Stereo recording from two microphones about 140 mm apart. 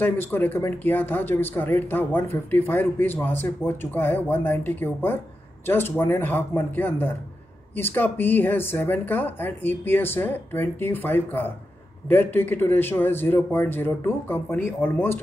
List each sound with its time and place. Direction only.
0.0 s speech: 15° left (ahead or behind)